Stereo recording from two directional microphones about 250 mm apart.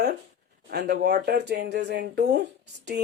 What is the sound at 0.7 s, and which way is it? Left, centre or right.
Speech, right.